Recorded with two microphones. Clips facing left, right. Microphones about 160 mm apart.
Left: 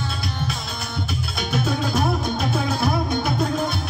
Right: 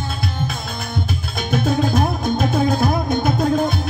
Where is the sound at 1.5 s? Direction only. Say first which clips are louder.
Right 5 dB; 45° right (ahead or behind).